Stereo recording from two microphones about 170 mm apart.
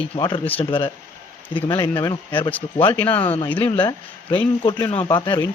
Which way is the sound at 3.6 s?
25° left (ahead or behind).